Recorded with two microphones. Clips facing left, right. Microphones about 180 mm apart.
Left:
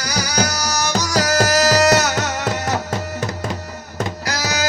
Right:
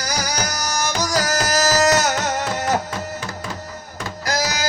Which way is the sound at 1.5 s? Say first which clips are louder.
Left 1 dB; 45° right (ahead or behind).